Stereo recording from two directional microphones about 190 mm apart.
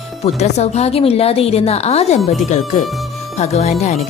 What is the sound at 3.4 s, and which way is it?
Speech, 35° left (ahead or behind).